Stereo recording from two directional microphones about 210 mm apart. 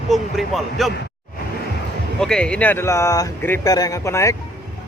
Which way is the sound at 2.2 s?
5° left (ahead or behind).